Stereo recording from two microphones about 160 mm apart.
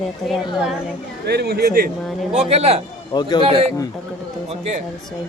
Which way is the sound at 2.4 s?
40° right (ahead or behind).